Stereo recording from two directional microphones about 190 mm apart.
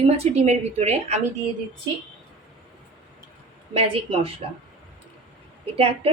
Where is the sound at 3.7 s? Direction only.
30° right (ahead or behind).